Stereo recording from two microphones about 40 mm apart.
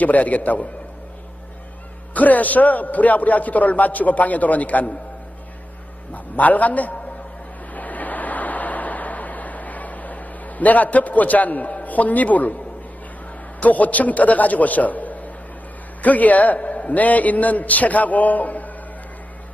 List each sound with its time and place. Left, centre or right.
0.0 s a man's voice: left
2.1 s a man's voice: left
6.3 s a man's voice: left
7.7 s vehicle: left
13.6 s a man's voice: left